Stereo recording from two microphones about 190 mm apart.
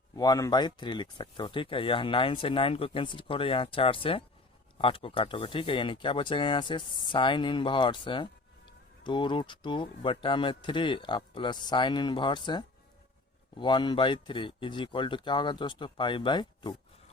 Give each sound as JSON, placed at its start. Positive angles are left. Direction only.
{"t": 0.2, "sound": "speech", "side_deg": 20}